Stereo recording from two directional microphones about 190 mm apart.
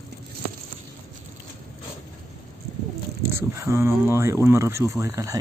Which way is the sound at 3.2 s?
15° right (ahead or behind).